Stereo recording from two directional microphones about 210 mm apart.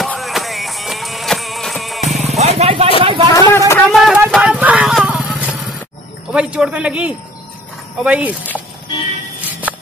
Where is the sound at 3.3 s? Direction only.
15° left (ahead or behind).